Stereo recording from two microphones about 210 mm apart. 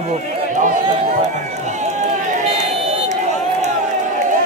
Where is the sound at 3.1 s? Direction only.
35° right (ahead or behind).